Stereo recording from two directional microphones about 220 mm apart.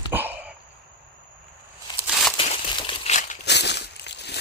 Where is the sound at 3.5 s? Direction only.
50° left (ahead or behind).